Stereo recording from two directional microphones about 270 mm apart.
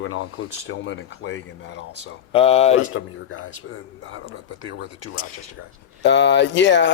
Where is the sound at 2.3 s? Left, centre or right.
Left.